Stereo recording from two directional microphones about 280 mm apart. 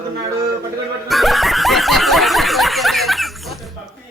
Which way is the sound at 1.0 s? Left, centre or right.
Centre.